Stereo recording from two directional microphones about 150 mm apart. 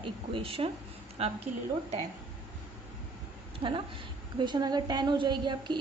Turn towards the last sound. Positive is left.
turn(degrees=-30)  # may be behind; listen again after turning